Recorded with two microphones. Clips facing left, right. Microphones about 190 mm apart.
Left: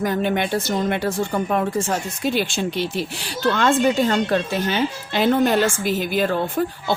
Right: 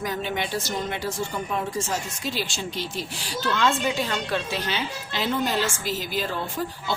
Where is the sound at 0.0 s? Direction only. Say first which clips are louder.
Left 7 dB; 55° left (ahead or behind).